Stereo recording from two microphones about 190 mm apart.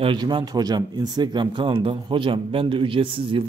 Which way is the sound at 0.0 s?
25° right (ahead or behind).